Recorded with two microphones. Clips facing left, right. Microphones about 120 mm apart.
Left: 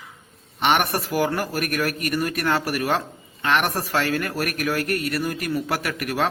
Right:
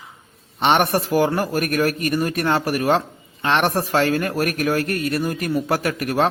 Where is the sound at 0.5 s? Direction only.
30° right (ahead or behind).